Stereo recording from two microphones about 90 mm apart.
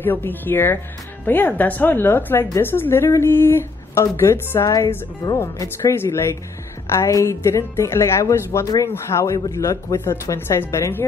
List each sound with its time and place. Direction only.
0.0 s speech: 25° left (ahead or behind)
4.7 s a woman's voice: 40° left (ahead or behind)
9.9 s speech: 30° left (ahead or behind)